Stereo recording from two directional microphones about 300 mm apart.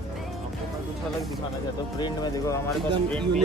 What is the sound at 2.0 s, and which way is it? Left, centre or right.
Speech, centre.